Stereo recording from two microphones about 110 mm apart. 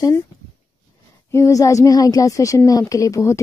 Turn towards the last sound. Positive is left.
turn(degrees=30)  # may be behind; listen again after turning